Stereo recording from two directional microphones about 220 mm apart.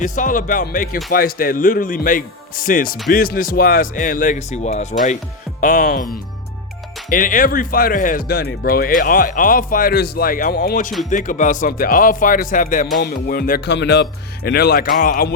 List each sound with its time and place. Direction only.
0.0 s speech: 35° left (ahead or behind)